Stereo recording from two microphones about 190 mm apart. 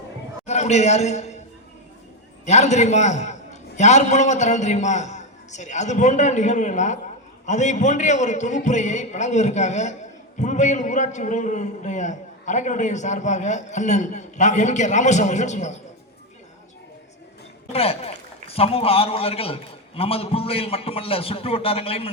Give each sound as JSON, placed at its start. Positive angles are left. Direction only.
{"t": 0.4, "sound": "a man's voice", "side_deg": 35}
{"t": 2.5, "sound": "a man's voice", "side_deg": 35}
{"t": 17.7, "sound": "a man's voice", "side_deg": 30}